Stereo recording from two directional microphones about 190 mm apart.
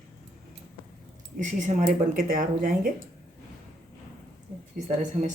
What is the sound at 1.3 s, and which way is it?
Speech, 40° right (ahead or behind).